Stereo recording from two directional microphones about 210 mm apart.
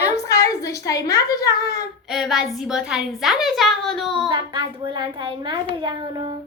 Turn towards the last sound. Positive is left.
turn(degrees=-20)  # may be behind; listen again after turning